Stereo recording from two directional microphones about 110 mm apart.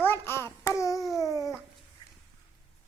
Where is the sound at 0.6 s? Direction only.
25° left (ahead or behind).